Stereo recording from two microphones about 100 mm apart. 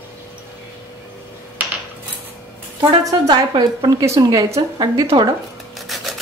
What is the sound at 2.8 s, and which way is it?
A woman's voice, 45° right (ahead or behind).